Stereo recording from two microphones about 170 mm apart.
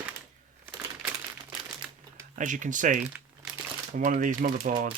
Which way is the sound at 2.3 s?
50° right (ahead or behind).